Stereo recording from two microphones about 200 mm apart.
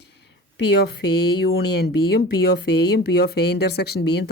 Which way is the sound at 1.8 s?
55° left (ahead or behind).